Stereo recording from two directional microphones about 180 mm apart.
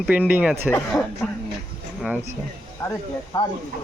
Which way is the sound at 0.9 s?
10° left (ahead or behind).